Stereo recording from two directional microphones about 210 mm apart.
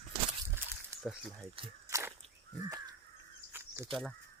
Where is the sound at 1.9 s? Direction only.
15° right (ahead or behind).